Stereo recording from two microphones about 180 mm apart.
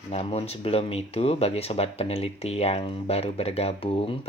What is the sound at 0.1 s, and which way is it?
Speech, 35° left (ahead or behind).